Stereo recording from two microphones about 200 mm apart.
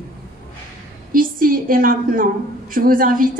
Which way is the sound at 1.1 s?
45° right (ahead or behind).